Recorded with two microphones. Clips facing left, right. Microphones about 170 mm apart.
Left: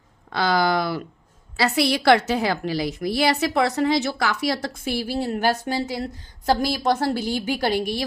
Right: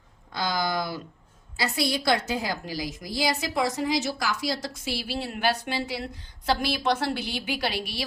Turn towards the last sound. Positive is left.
turn(degrees=45)  # may be behind; listen again after turning